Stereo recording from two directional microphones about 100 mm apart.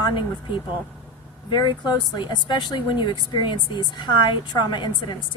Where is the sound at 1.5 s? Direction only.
50° left (ahead or behind).